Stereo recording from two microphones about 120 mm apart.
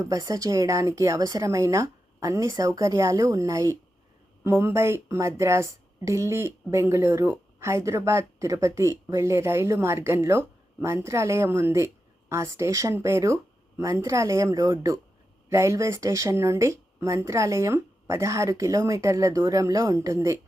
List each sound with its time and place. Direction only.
0.0 s a woman's voice: 30° right (ahead or behind)